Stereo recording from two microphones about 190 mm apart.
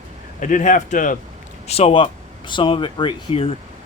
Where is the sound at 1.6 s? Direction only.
30° left (ahead or behind).